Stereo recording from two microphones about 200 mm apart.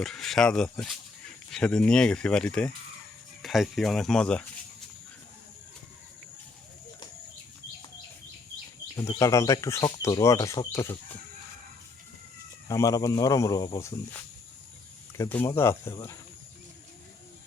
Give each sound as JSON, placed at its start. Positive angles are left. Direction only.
{"t": 0.0, "sound": "speech", "side_deg": 0}
{"t": 9.1, "sound": "speech", "side_deg": 15}
{"t": 12.6, "sound": "speech", "side_deg": 15}
{"t": 15.2, "sound": "speech", "side_deg": 10}